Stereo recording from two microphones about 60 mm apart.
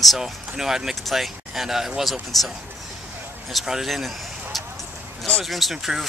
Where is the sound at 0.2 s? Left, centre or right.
Centre.